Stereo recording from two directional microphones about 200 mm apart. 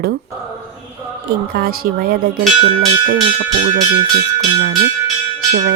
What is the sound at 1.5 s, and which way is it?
Speech, 50° right (ahead or behind).